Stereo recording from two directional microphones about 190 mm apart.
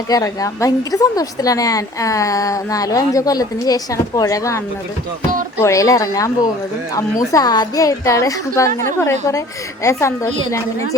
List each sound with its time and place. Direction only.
0.1 s a woman's voice: 15° left (ahead or behind)
7.3 s a woman's voice: 20° left (ahead or behind)